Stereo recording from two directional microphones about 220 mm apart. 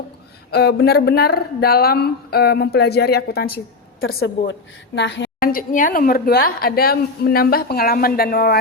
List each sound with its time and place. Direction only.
0.5 s a woman's voice: 45° left (ahead or behind)
4.0 s a woman's voice: 65° left (ahead or behind)
4.9 s a woman's voice: 55° left (ahead or behind)